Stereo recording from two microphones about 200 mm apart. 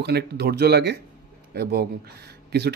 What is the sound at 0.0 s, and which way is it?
Speech, 55° right (ahead or behind).